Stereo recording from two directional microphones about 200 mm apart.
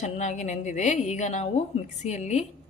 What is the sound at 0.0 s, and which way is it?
A woman's voice, 35° left (ahead or behind).